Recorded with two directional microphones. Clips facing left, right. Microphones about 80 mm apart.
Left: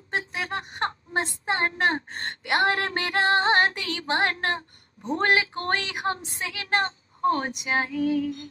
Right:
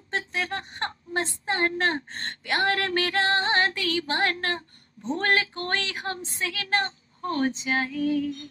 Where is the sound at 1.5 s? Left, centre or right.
Left.